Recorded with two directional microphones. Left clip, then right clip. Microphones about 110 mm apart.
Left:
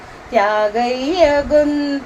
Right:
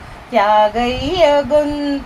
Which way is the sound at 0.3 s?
45° left (ahead or behind).